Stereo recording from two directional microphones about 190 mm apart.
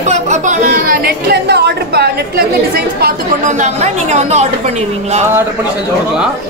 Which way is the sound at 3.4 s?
40° right (ahead or behind).